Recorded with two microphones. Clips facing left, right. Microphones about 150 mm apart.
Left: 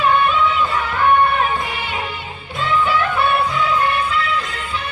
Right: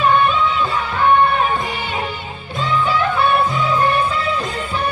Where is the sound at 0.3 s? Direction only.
30° right (ahead or behind).